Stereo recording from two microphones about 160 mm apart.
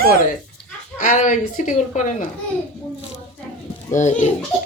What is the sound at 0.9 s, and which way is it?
Speech, 50° left (ahead or behind).